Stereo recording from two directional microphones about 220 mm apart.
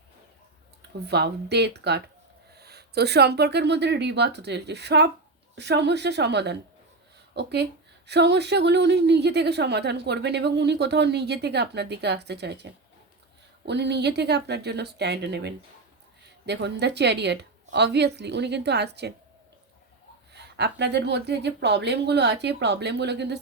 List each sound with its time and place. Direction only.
1.0 s a woman's voice: 50° right (ahead or behind)
20.3 s a woman's voice: 50° right (ahead or behind)